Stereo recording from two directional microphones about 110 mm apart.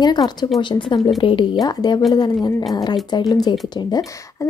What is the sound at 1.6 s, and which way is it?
A woman's voice, 40° left (ahead or behind).